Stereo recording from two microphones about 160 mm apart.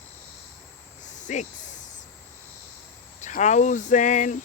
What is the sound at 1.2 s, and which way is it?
Speech, 50° left (ahead or behind).